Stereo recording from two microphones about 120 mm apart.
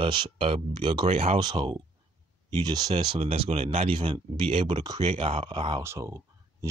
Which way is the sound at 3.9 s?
45° right (ahead or behind).